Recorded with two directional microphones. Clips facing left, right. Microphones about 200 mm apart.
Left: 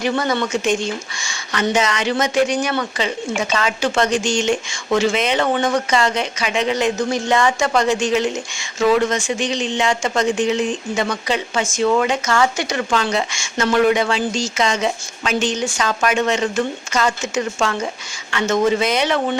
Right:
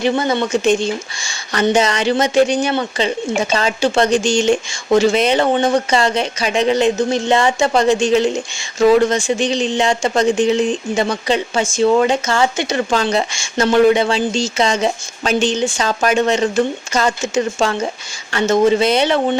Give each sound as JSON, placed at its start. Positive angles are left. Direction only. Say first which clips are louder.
{"t": 0.0, "sound": "speech", "louder": "right 3 dB", "side_deg": -25}